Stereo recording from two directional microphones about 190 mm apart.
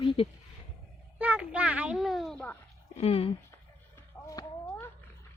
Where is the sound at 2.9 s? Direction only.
30° left (ahead or behind).